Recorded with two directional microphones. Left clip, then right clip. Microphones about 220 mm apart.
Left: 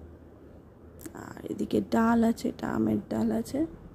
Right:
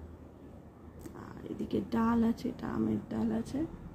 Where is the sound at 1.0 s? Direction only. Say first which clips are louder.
Left 6 dB; 40° left (ahead or behind).